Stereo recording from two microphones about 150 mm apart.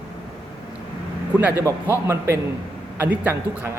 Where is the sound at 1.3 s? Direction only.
10° right (ahead or behind).